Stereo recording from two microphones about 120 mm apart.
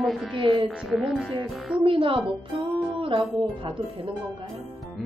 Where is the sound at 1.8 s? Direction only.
45° right (ahead or behind).